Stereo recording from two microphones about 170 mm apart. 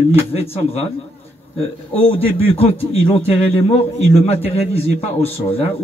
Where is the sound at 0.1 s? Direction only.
35° left (ahead or behind).